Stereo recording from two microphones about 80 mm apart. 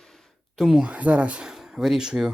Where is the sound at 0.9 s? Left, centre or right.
Centre.